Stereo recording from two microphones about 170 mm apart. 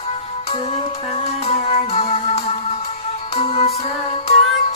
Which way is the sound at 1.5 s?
35° left (ahead or behind).